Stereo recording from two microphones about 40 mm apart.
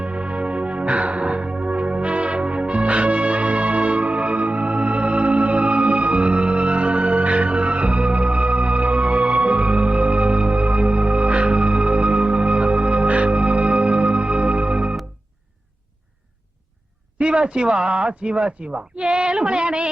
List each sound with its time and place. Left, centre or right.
0.0 s music: right
17.2 s speech: right